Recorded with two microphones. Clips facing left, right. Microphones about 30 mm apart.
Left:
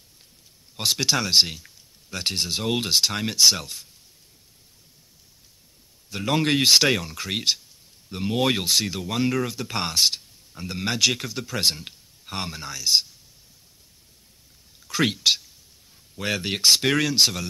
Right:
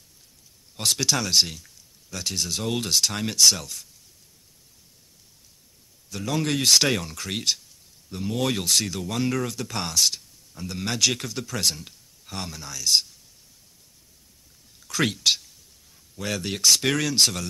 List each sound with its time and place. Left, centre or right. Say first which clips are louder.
0.7 s speech: left 1 dB; centre
6.0 s a man's voice: left 4 dB; left
6.9 s speech: left 2 dB; centre
8.1 s speech: left 3 dB; left; by 9.7 s centre
9.7 s speech: left 2 dB; left
14.9 s speech: left 1 dB; centre
16.2 s speech: left 2 dB; left
16.8 s speech: left 2 dB; centre